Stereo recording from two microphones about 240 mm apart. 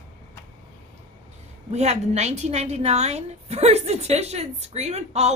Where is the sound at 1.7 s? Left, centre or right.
Right.